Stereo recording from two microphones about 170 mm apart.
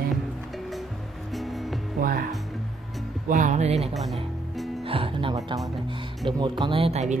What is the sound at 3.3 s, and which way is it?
Speech, 50° right (ahead or behind).